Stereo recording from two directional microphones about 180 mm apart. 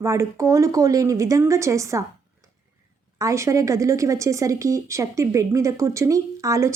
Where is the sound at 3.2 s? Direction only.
15° right (ahead or behind).